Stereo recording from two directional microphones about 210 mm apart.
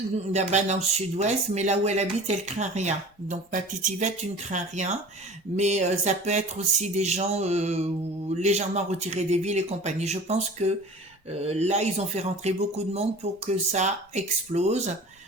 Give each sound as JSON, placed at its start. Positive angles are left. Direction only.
{"t": 0.3, "sound": "speech", "side_deg": -30}